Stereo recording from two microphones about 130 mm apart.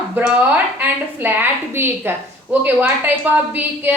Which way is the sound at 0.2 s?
15° right (ahead or behind).